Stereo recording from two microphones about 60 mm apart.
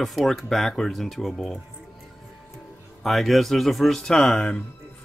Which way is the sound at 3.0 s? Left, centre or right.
Centre.